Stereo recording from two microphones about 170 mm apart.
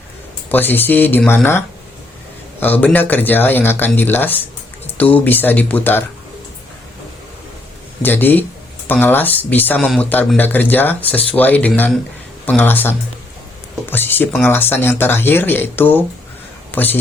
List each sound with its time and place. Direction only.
0.5 s speech: 10° left (ahead or behind)
8.0 s speech: 10° left (ahead or behind)
13.9 s speech: 10° left (ahead or behind)